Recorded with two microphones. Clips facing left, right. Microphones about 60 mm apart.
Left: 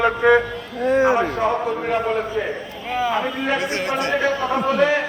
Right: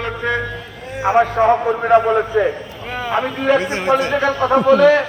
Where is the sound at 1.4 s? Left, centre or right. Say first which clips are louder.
Right 6 dB; right.